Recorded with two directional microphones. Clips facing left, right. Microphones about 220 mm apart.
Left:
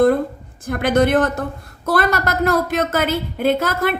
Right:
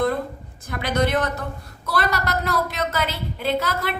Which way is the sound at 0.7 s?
50° left (ahead or behind).